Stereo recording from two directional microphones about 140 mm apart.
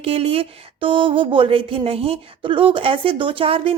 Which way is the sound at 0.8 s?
35° right (ahead or behind).